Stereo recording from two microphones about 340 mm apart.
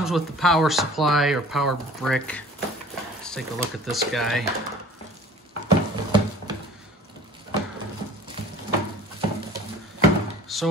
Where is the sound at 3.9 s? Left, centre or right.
Centre.